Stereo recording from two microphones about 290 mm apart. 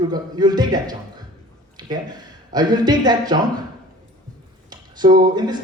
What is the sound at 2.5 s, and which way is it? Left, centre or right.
Speech, centre.